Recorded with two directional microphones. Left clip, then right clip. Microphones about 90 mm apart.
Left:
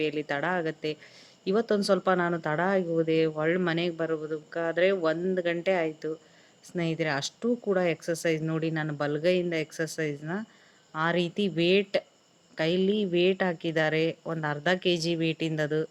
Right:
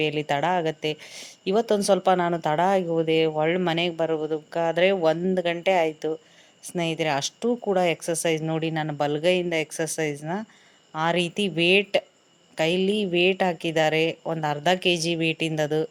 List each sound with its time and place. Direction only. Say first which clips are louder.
0.0 s speech: right 5 dB; 25° right (ahead or behind)